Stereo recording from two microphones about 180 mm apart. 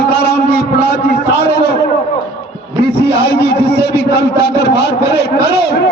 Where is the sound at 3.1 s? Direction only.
65° left (ahead or behind).